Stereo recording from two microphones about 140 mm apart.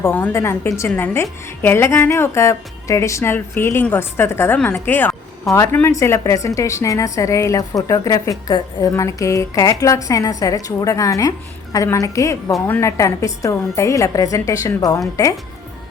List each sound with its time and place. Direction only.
0.0 s a woman's voice: 15° left (ahead or behind)